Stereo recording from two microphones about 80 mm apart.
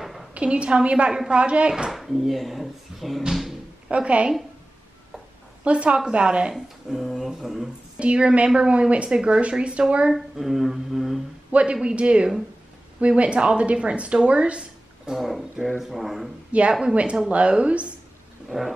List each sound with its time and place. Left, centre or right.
0.0 s a sound: centre
0.3 s speech: centre
3.9 s speech: centre
5.6 s speech: centre
15.1 s speech: centre
16.5 s speech: centre